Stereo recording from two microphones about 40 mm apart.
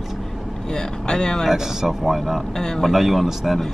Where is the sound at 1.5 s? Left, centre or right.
Centre.